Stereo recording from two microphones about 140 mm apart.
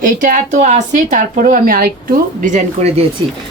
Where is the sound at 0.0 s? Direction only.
75° right (ahead or behind).